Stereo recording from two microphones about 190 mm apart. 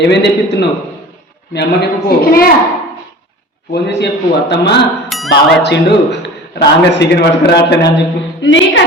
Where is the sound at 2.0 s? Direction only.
50° left (ahead or behind).